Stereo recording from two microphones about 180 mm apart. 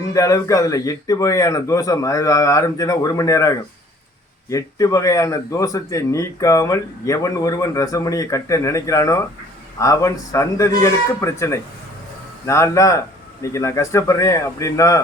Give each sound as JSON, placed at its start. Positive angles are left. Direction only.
{"t": 0.1, "sound": "speech", "side_deg": 20}